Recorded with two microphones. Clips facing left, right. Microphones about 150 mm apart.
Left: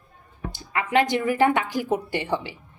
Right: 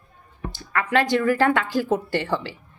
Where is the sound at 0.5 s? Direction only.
15° left (ahead or behind).